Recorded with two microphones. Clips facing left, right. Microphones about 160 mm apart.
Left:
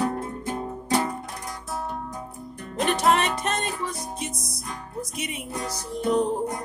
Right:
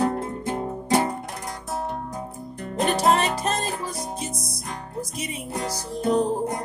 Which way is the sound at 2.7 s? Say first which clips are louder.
Right 1 dB; 35° right (ahead or behind).